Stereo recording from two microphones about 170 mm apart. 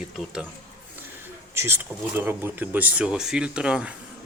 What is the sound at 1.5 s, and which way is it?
Speech, 15° right (ahead or behind).